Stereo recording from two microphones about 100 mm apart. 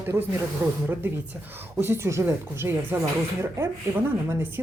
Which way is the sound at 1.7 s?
25° right (ahead or behind).